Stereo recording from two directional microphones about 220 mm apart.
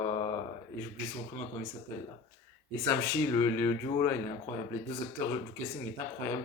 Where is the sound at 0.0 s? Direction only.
20° left (ahead or behind).